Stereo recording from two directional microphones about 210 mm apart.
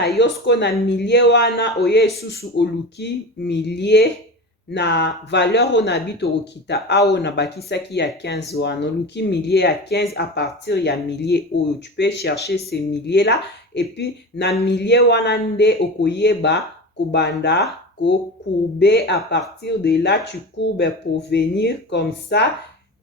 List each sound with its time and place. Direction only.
0.2 s speech: 55° left (ahead or behind)
18.8 s speech: 50° left (ahead or behind)